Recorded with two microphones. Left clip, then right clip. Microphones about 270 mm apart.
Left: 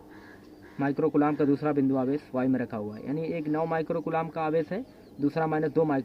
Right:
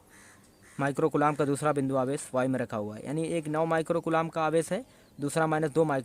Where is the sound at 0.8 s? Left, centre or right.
Right.